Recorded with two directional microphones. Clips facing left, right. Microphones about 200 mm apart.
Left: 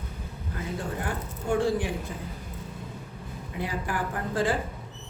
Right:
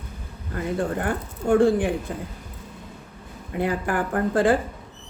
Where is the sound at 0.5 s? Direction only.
55° right (ahead or behind).